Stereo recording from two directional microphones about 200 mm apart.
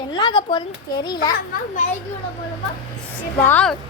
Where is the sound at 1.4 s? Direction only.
40° left (ahead or behind).